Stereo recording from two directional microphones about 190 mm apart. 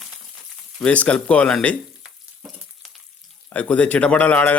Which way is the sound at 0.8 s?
5° left (ahead or behind).